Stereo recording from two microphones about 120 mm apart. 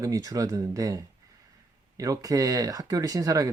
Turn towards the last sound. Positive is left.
turn(degrees=-30)  # may be behind; listen again after turning